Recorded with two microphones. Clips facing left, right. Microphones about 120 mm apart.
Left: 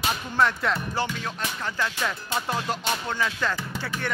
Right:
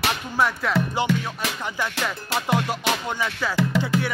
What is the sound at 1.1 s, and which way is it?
Speech, 90° right.